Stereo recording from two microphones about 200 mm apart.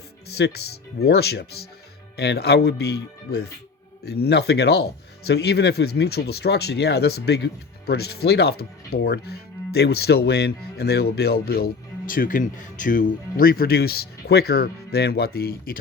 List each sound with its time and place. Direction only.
0.3 s speech: 55° left (ahead or behind)